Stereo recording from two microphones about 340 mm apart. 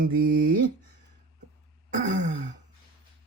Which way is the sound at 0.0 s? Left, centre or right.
Right.